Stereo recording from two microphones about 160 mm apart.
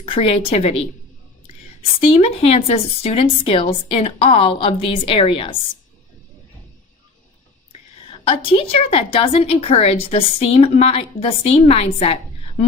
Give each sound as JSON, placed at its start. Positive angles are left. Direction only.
{"t": 0.0, "sound": "a woman's voice", "side_deg": 35}
{"t": 2.0, "sound": "a woman's voice", "side_deg": 35}
{"t": 8.2, "sound": "a woman's voice", "side_deg": 35}